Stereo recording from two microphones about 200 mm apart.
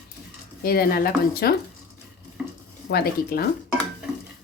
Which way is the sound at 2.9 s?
50° left (ahead or behind).